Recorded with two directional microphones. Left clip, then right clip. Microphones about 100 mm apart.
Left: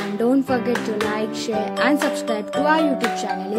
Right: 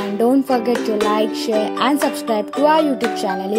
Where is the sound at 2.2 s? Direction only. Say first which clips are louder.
Right 6 dB; 40° right (ahead or behind).